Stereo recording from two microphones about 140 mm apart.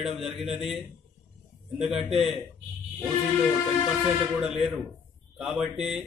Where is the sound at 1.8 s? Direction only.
5° right (ahead or behind).